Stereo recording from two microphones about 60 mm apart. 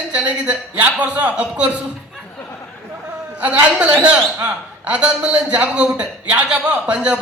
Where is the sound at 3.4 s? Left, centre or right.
Right.